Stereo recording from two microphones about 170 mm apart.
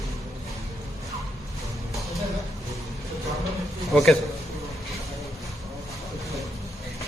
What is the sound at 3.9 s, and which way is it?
Speech, centre (ahead or behind).